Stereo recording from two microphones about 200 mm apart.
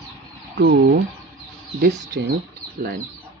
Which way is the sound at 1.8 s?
55° right (ahead or behind).